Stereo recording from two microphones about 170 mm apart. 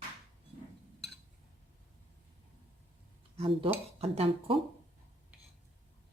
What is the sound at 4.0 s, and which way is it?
Speech, 35° right (ahead or behind).